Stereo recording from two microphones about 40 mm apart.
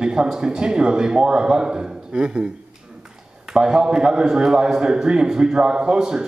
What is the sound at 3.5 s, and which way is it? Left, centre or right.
A man's voice, centre.